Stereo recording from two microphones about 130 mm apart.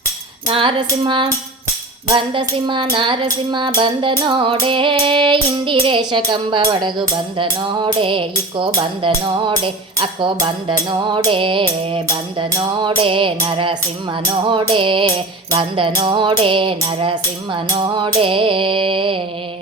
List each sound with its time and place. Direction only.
0.4 s music: 40° right (ahead or behind)
12.5 s music: 30° right (ahead or behind)
13.0 s music: 40° right (ahead or behind)